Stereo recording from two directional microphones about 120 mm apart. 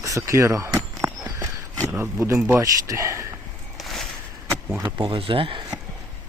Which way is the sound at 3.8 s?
Centre (ahead or behind).